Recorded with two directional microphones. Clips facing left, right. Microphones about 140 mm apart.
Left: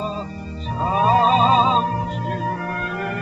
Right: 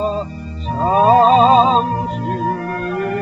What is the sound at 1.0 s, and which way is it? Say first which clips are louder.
Music: right 6 dB; 40° right (ahead or behind).